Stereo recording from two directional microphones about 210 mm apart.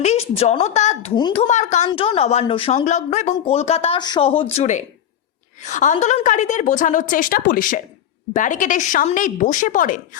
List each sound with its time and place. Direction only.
0.0 s a woman's voice: 30° left (ahead or behind)